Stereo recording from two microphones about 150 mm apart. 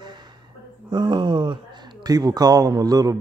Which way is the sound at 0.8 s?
30° right (ahead or behind).